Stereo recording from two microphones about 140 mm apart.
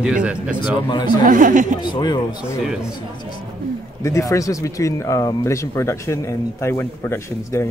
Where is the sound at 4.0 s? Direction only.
20° left (ahead or behind).